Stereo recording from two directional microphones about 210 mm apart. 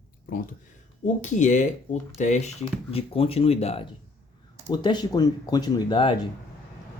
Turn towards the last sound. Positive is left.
turn(degrees=25)  # may be behind; listen again after turning